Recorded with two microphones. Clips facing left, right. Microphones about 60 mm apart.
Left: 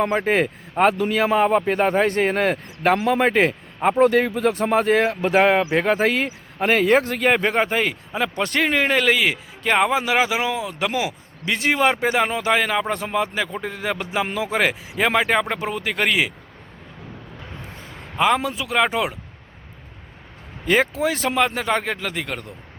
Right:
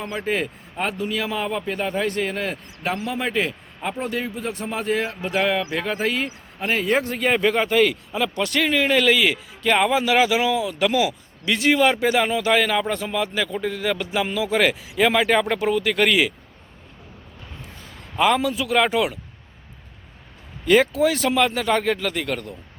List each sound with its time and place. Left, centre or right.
0.0 s a man's voice: left
0.4 s a man's voice: left
14.3 s a man's voice: left
14.5 s speech: left
18.3 s speech: left
20.7 s speech: left